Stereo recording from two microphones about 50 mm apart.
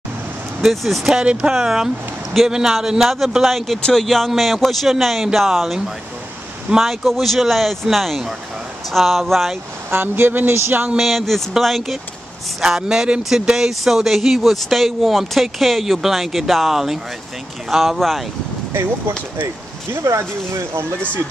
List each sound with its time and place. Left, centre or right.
0.6 s speech: centre
1.2 s speech: right
2.4 s speech: centre
6.8 s speech: centre
9.8 s speech: right
11.0 s speech: centre
18.7 s speech: right
19.4 s speech: right